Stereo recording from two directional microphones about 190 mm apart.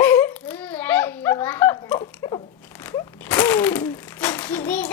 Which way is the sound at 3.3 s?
10° left (ahead or behind).